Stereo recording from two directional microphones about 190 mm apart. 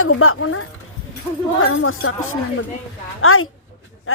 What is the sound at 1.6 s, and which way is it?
Speech, 90° left.